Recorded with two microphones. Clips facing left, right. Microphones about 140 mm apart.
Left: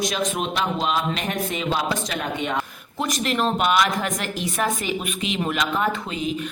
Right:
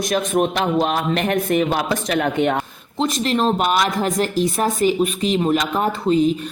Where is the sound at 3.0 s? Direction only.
30° right (ahead or behind).